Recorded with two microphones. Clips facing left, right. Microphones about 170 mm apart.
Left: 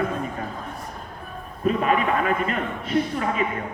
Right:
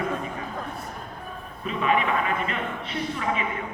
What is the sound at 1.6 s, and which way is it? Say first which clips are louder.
A man's voice: left 3 dB; 45° left (ahead or behind).